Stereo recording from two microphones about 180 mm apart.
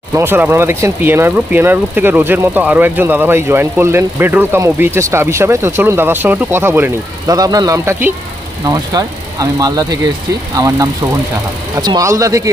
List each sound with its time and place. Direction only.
0.1 s speech: 10° right (ahead or behind)